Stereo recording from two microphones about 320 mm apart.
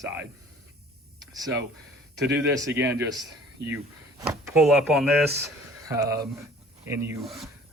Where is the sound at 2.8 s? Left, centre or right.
Centre.